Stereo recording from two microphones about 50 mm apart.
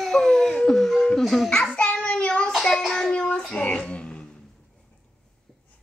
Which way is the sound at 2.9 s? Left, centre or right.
Centre.